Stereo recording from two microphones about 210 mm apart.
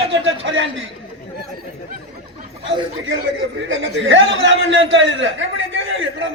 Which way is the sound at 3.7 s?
60° right (ahead or behind).